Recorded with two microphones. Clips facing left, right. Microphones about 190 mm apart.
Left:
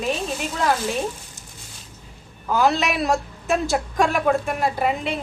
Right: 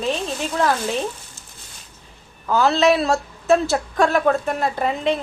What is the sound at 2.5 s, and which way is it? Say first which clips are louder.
A woman's voice: right 4 dB; 15° left (ahead or behind).